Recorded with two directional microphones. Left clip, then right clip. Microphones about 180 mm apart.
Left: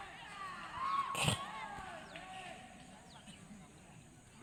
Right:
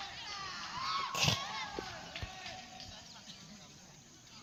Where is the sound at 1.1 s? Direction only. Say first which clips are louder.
Right 4 dB; 15° right (ahead or behind).